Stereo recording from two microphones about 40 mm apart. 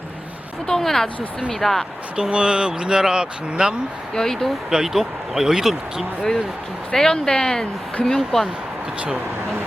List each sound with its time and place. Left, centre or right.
0.7 s speech: centre
2.3 s speech: right
4.1 s speech: centre
4.7 s speech: centre
6.9 s speech: centre